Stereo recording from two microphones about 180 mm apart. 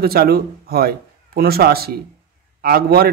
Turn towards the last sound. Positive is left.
turn(degrees=-60)  # may be behind; listen again after turning